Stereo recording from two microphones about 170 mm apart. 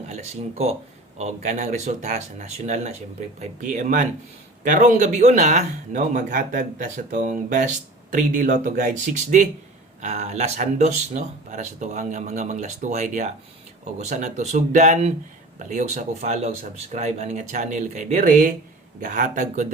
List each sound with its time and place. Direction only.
0.1 s speech: 40° right (ahead or behind)